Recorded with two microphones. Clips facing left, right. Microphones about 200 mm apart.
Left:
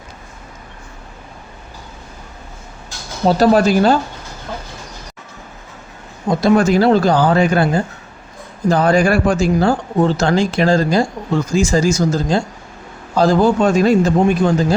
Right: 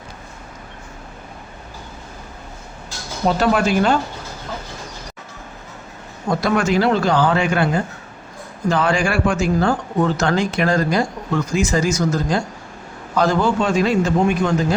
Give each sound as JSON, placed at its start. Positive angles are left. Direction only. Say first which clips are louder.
{"t": 3.2, "sound": "speech", "louder": "left 5 dB", "side_deg": 35}
{"t": 6.2, "sound": "speech", "louder": "left 4 dB", "side_deg": 20}
{"t": 6.6, "sound": "speech", "louder": "left 5 dB", "side_deg": 35}
{"t": 13.6, "sound": "speech", "louder": "left 5 dB", "side_deg": 45}